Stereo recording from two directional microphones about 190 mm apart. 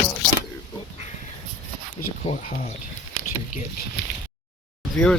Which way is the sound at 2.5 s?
45° left (ahead or behind).